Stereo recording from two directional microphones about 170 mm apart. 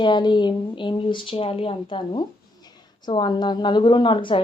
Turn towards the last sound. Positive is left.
turn(degrees=30)  # may be behind; listen again after turning